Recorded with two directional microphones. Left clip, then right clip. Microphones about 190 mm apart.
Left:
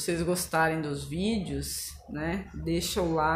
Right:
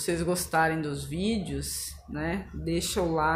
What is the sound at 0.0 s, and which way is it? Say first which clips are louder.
Speech: right 1 dB; 5° right (ahead or behind).